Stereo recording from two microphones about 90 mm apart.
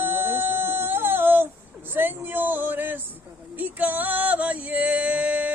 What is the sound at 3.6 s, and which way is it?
Music, 20° right (ahead or behind).